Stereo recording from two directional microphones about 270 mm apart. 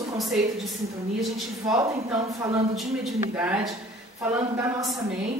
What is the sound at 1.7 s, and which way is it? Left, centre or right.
A woman's voice, centre.